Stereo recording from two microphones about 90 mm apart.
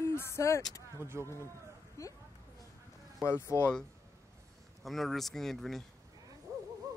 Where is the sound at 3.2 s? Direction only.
30° left (ahead or behind).